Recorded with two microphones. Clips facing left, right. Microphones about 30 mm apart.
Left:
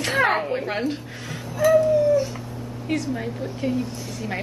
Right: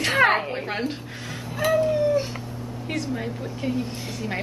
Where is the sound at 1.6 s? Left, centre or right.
Right.